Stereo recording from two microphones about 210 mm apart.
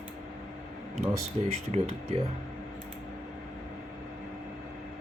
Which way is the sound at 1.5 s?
30° right (ahead or behind).